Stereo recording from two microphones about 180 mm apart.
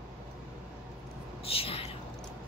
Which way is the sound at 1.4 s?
30° left (ahead or behind).